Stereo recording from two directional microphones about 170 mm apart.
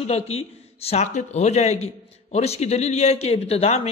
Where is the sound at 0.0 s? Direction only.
35° left (ahead or behind).